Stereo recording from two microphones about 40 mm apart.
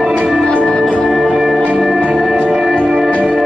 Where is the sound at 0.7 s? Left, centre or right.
Left.